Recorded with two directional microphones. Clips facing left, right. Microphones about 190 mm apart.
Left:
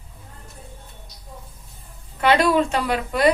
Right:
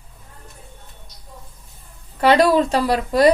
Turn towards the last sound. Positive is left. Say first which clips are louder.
# right 5 dB
turn(degrees=-35)  # may be behind; listen again after turning